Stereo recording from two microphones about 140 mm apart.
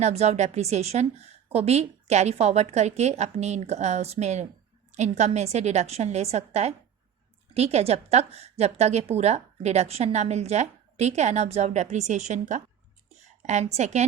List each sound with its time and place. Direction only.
0.0 s a woman's voice: 50° right (ahead or behind)